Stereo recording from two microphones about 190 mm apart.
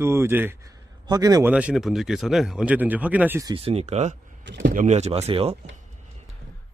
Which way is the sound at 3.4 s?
30° right (ahead or behind).